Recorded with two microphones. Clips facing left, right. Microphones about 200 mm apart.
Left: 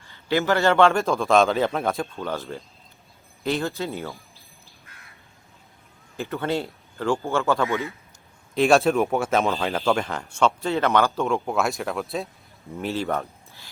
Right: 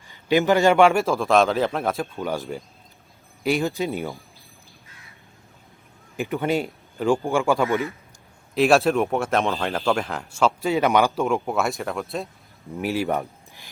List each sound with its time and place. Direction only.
0.1 s a man's voice: 15° right (ahead or behind)
1.0 s speech: centre (ahead or behind)
2.0 s a man's voice: 15° right (ahead or behind)
6.1 s a man's voice: 15° right (ahead or behind)
8.5 s speech: centre (ahead or behind)
10.6 s a man's voice: 10° right (ahead or behind)
11.4 s speech: centre (ahead or behind)
12.8 s speech: 15° right (ahead or behind)